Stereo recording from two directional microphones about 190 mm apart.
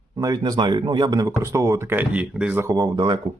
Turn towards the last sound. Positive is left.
turn(degrees=-25)  # may be behind; listen again after turning